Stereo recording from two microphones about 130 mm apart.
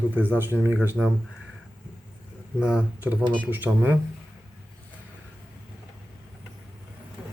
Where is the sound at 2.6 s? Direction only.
10° right (ahead or behind).